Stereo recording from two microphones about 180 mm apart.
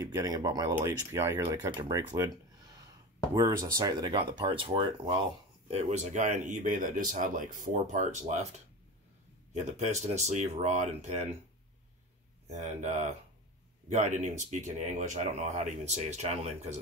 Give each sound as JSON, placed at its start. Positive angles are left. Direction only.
{"t": 0.0, "sound": "speech", "side_deg": -20}
{"t": 3.3, "sound": "speech", "side_deg": -20}
{"t": 5.7, "sound": "speech", "side_deg": -40}
{"t": 9.5, "sound": "speech", "side_deg": -40}
{"t": 12.5, "sound": "speech", "side_deg": -40}